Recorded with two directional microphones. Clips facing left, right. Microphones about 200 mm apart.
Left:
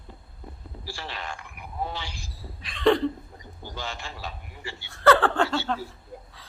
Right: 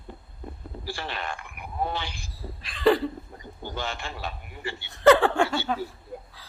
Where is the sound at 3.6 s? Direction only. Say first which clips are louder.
Right 3 dB; 60° right (ahead or behind).